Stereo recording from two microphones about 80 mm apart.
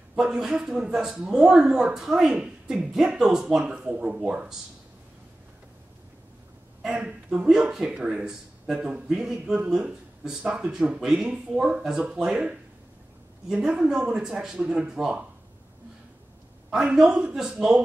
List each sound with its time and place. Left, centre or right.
0.1 s speech: centre
7.2 s speech: centre
16.7 s speech: centre